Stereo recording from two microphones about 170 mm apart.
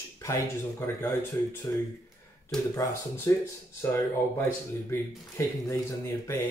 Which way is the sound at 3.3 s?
15° left (ahead or behind).